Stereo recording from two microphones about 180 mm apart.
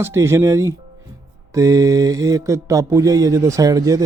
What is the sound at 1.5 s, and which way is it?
Mantra, 20° right (ahead or behind).